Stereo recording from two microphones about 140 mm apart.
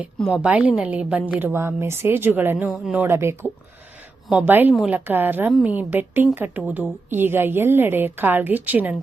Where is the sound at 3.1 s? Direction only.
20° right (ahead or behind).